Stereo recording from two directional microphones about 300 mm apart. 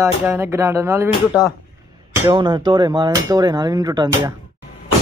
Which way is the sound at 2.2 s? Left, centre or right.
Centre.